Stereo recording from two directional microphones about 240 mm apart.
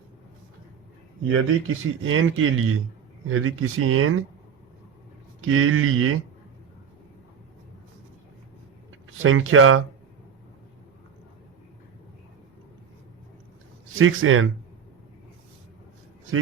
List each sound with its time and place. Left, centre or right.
1.3 s speech: right
5.5 s speech: right
9.0 s speech: right
14.0 s speech: right